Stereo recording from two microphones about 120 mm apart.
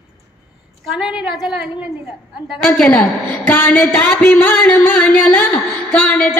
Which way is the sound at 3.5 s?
15° left (ahead or behind).